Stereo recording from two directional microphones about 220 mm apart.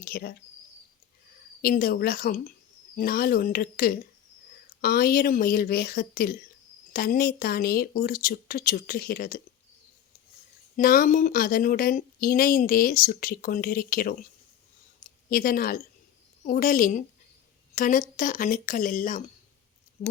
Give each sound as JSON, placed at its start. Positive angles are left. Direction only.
{"t": 0.0, "sound": "speech", "side_deg": 45}
{"t": 1.6, "sound": "speech", "side_deg": 40}
{"t": 10.8, "sound": "speech", "side_deg": 40}
{"t": 15.3, "sound": "a woman's voice", "side_deg": 40}